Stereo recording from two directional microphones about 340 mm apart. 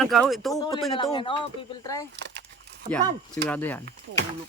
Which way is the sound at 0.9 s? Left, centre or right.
Centre.